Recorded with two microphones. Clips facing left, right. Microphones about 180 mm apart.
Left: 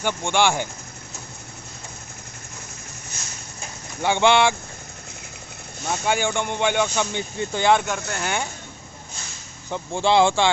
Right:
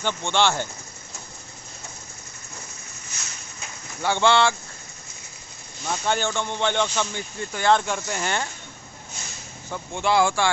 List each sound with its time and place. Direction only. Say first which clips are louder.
0.0 s speech: left 2 dB; 10° left (ahead or behind)
4.0 s speech: left 2 dB; 15° left (ahead or behind)
5.9 s speech: left 2 dB; 10° left (ahead or behind)
7.8 s speech: even; centre (ahead or behind)
9.7 s speech: left 3 dB; 25° left (ahead or behind)